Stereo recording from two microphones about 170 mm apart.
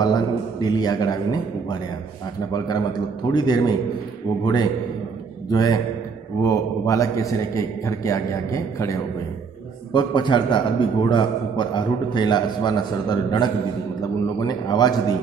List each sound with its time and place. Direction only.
0.0 s a man's voice: 25° left (ahead or behind)
5.5 s a man's voice: 20° left (ahead or behind)
9.9 s a man's voice: 25° left (ahead or behind)